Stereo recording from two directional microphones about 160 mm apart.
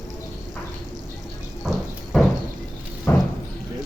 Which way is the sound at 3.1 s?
15° left (ahead or behind).